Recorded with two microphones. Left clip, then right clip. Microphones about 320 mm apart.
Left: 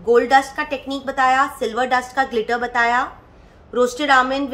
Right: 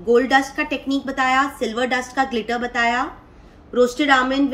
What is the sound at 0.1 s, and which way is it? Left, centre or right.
A woman's voice, centre.